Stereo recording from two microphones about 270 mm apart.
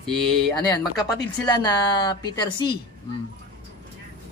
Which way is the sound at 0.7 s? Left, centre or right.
Centre.